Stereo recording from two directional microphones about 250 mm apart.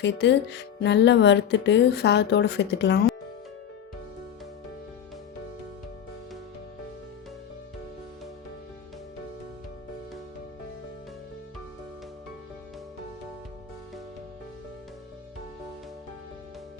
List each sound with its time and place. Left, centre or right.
0.0 s speech: left